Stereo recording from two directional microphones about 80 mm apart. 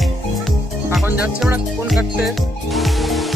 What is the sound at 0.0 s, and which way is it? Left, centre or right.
Music, centre.